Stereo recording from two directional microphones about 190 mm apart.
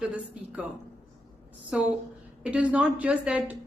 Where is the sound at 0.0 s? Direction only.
5° right (ahead or behind).